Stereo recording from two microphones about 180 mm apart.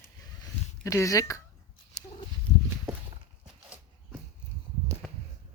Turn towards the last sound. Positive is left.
turn(degrees=5)  # may be behind; listen again after turning